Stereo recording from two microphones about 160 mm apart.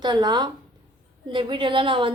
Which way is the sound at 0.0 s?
25° right (ahead or behind).